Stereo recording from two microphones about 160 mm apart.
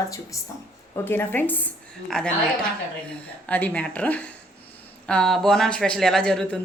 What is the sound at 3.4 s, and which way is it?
A woman's voice, 10° left (ahead or behind).